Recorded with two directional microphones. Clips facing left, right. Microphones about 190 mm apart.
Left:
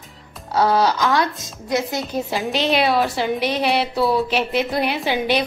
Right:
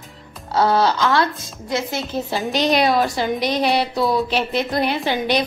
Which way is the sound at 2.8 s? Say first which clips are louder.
Right 1 dB; 5° left (ahead or behind).